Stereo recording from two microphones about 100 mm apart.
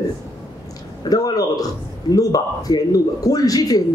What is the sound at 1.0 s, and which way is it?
A man's voice, 40° left (ahead or behind).